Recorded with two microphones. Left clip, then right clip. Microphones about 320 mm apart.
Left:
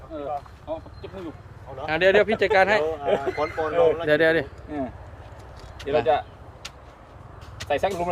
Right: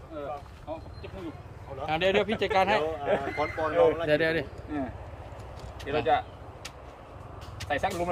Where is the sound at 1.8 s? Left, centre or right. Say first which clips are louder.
Left 7 dB; centre.